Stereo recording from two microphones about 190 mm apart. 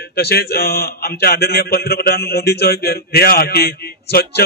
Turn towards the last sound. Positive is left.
turn(degrees=55)  # may be behind; listen again after turning